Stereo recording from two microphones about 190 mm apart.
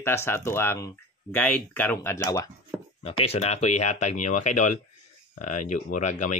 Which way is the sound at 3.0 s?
30° left (ahead or behind).